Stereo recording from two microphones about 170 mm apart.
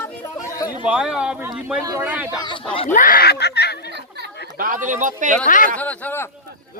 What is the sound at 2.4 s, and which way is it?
Speech, 30° left (ahead or behind).